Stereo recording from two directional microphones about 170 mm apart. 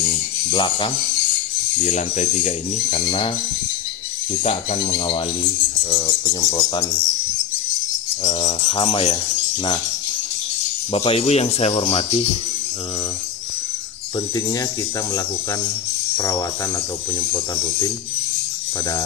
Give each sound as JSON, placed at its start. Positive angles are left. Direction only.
{"t": 0.5, "sound": "speech", "side_deg": 30}
{"t": 1.8, "sound": "speech", "side_deg": 40}
{"t": 4.3, "sound": "speech", "side_deg": 35}
{"t": 8.2, "sound": "a sound", "side_deg": 45}
{"t": 8.5, "sound": "speech", "side_deg": 25}
{"t": 10.9, "sound": "speech", "side_deg": 35}
{"t": 16.2, "sound": "speech", "side_deg": 20}